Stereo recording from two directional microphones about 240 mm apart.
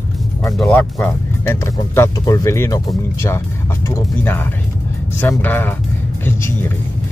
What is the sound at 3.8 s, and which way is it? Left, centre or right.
Speech, centre.